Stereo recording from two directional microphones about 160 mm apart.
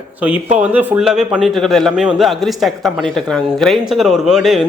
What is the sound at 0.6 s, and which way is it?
A man's voice, 10° right (ahead or behind).